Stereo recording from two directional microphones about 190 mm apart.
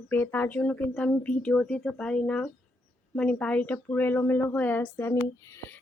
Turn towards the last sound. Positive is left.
turn(degrees=15)  # may be behind; listen again after turning